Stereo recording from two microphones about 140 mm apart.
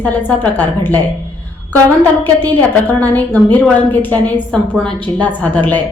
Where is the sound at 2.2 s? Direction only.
15° left (ahead or behind).